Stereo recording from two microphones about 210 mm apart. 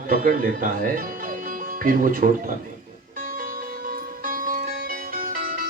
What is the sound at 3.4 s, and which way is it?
Music, 40° right (ahead or behind).